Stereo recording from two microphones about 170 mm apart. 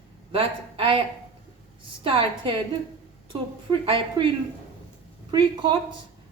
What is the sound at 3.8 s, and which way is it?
Speech, 30° right (ahead or behind).